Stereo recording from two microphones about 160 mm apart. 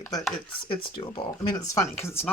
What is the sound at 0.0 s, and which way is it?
Speech, 20° left (ahead or behind).